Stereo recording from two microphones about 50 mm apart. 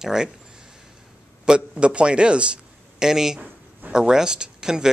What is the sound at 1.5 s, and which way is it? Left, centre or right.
A man's voice, right.